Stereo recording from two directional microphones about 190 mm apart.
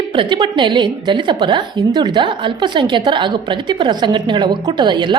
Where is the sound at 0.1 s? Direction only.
25° right (ahead or behind).